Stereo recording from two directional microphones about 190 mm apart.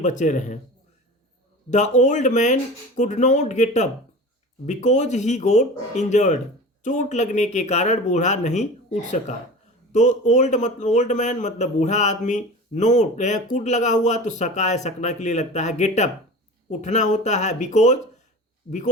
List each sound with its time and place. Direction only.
0.0 s a man's voice: 40° left (ahead or behind)
1.7 s a man's voice: 40° left (ahead or behind)